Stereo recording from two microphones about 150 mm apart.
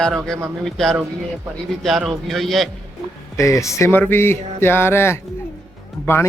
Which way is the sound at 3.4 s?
20° left (ahead or behind).